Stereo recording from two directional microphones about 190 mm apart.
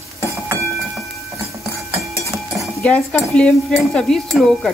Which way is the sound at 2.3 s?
5° left (ahead or behind).